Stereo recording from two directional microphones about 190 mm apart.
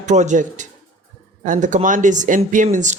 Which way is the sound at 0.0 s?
40° right (ahead or behind).